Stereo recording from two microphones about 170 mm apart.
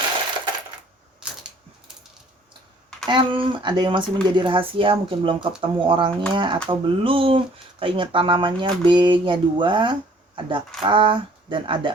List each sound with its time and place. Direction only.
3.1 s speech: 30° right (ahead or behind)